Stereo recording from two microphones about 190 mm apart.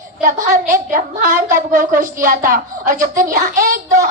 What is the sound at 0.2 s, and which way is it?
A woman's voice, 45° right (ahead or behind).